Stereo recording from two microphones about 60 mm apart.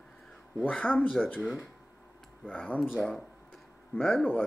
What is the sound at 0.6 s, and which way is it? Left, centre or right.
Speech, left.